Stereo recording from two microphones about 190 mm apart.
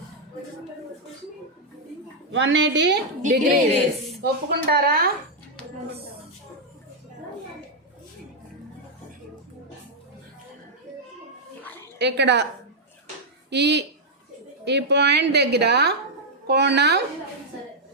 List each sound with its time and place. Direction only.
2.3 s a woman's voice: 70° right (ahead or behind)
3.2 s a woman's voice: 40° right (ahead or behind)
4.2 s a woman's voice: 55° right (ahead or behind)
11.9 s a woman's voice: 65° right (ahead or behind)
13.5 s a woman's voice: 65° right (ahead or behind)